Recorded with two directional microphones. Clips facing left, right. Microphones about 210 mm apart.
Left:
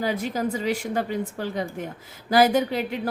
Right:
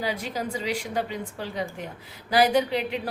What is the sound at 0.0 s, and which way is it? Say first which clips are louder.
A woman's voice: left 4 dB; 50° left (ahead or behind).